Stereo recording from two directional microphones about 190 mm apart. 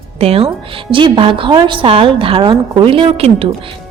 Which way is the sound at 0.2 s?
30° right (ahead or behind).